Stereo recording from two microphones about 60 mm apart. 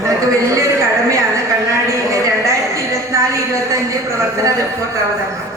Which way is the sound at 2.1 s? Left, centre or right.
Right.